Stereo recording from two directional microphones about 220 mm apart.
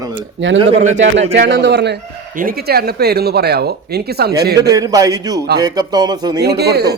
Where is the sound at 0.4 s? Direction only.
60° right (ahead or behind).